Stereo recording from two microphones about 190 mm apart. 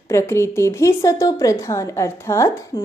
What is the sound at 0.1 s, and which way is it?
A woman's voice, 15° left (ahead or behind).